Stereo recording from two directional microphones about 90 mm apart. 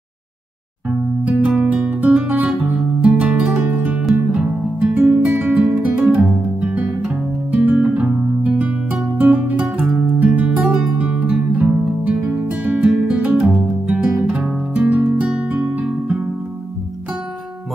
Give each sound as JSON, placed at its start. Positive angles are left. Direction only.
{"t": 0.8, "sound": "music", "side_deg": -15}